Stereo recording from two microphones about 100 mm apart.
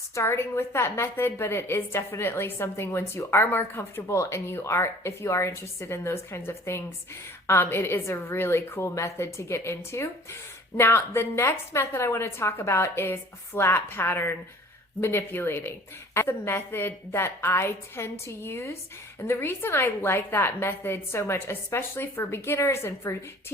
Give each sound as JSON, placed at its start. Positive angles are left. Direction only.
{"t": 0.1, "sound": "a woman's voice", "side_deg": 25}